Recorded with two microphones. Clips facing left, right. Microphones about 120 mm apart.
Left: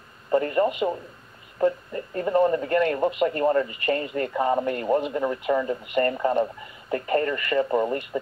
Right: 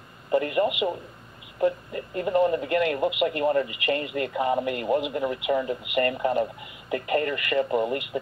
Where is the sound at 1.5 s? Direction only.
40° left (ahead or behind).